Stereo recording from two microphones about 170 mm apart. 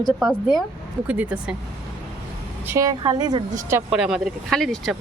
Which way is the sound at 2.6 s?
15° right (ahead or behind).